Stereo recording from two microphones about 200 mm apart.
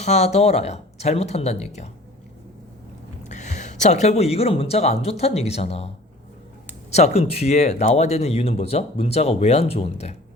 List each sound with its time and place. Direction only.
0.0 s speech: 35° left (ahead or behind)
3.2 s speech: 35° left (ahead or behind)
6.9 s speech: 30° left (ahead or behind)